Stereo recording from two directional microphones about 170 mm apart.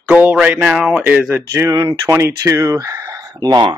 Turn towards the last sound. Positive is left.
turn(degrees=-25)  # may be behind; listen again after turning